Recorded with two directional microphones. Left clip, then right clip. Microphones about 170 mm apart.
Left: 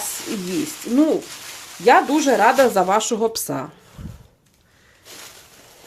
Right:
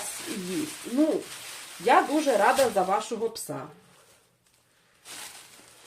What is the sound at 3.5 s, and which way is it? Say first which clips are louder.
Speech: left 10 dB; 70° left (ahead or behind).